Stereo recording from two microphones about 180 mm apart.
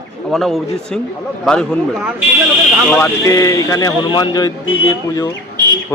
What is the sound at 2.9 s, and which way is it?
Speech, 15° left (ahead or behind).